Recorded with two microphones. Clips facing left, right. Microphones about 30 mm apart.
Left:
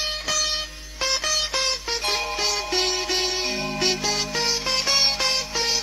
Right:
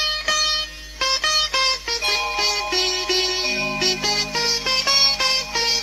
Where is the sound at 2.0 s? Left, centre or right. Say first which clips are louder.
Right 4 dB; right.